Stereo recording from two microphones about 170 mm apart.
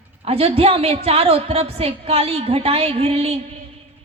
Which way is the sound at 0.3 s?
35° right (ahead or behind).